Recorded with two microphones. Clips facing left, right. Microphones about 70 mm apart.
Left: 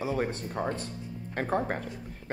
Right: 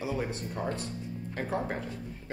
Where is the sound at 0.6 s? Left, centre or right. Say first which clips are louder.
Left 2 dB; left.